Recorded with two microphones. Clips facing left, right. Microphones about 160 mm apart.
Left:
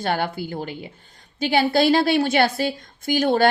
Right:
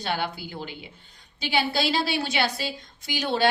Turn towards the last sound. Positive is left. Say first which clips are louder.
# left 8 dB
turn(degrees=50)  # may be behind; listen again after turning